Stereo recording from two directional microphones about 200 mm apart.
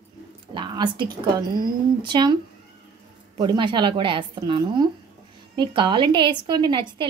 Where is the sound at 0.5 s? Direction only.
20° right (ahead or behind).